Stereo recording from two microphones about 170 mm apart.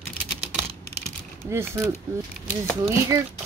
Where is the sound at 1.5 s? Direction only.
15° right (ahead or behind).